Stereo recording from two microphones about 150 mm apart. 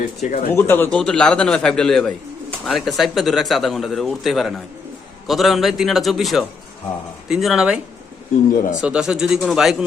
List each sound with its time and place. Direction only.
0.0 s speech: 55° left (ahead or behind)
0.5 s a man's voice: 15° left (ahead or behind); by 7.8 s 5° right (ahead or behind)
8.8 s a man's voice: 5° right (ahead or behind)